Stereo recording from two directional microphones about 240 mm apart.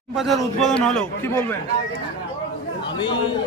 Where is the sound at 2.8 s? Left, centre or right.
Centre.